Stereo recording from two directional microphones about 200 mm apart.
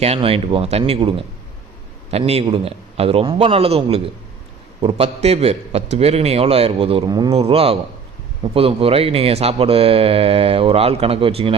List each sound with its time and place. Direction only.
0.0 s a man's voice: 30° right (ahead or behind)